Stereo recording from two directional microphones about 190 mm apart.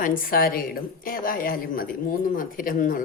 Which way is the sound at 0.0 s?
50° left (ahead or behind).